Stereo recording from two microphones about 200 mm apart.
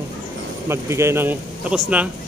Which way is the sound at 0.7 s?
15° right (ahead or behind).